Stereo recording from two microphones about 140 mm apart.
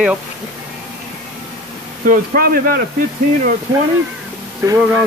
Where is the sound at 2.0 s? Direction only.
85° right.